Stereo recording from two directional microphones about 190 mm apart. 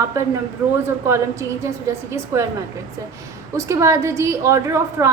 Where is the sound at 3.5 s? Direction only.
15° right (ahead or behind).